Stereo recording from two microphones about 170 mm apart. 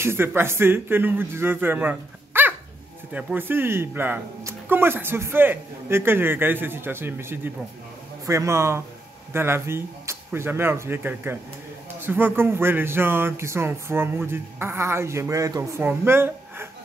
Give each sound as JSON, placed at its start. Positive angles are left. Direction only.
{"t": 0.0, "sound": "speech", "side_deg": -15}